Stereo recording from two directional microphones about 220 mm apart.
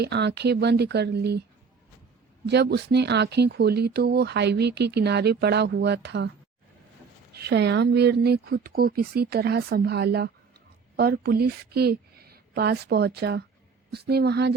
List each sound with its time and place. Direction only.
0.0 s speech: 50° right (ahead or behind)
2.5 s speech: 50° right (ahead or behind)
7.3 s speech: 50° right (ahead or behind)